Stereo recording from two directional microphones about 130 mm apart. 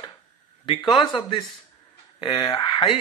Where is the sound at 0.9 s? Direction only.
40° left (ahead or behind).